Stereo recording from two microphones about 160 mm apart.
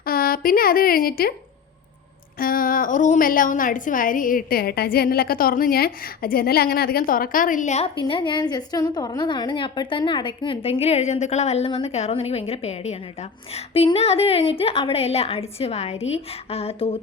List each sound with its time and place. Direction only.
0.0 s a woman's voice: 65° left (ahead or behind)
2.4 s a woman's voice: 60° left (ahead or behind)
7.9 s a woman's voice: 30° left (ahead or behind)